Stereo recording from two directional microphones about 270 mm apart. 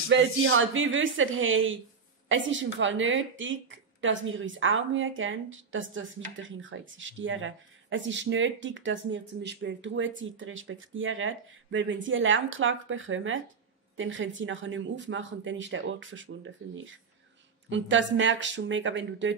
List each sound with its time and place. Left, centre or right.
0.1 s a woman's voice: right